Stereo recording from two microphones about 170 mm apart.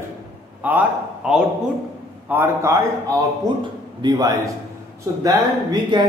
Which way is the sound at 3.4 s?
25° right (ahead or behind).